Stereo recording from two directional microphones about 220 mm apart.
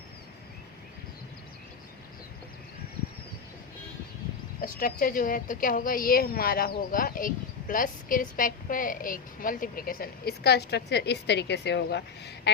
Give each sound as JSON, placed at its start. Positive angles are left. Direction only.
{"t": 4.6, "sound": "a woman's voice", "side_deg": 40}